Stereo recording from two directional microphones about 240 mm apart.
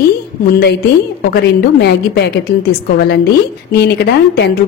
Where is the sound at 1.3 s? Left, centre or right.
Left.